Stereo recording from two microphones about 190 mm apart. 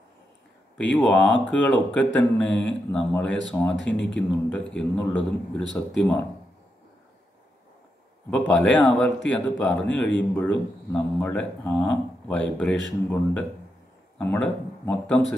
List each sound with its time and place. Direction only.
0.9 s a man's voice: 5° left (ahead or behind)
3.7 s speech: 70° left (ahead or behind)
4.5 s a man's voice: 5° left (ahead or behind)
8.3 s a man's voice: 5° left (ahead or behind)